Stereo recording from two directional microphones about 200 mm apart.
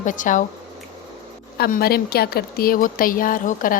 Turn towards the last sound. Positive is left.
turn(degrees=45)  # may be behind; listen again after turning